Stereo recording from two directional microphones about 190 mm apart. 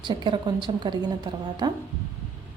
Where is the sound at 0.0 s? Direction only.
25° right (ahead or behind).